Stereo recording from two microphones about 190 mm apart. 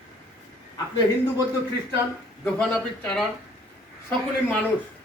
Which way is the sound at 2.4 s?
5° left (ahead or behind).